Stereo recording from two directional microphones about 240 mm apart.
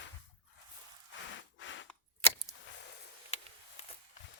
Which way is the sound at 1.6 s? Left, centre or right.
Left.